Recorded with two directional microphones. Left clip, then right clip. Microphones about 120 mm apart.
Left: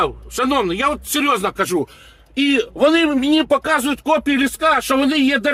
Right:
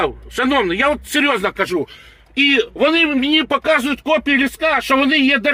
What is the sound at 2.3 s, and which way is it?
Speech, centre (ahead or behind).